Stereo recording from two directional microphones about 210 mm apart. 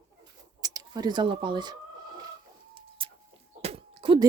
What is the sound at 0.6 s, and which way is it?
Speech, 20° right (ahead or behind).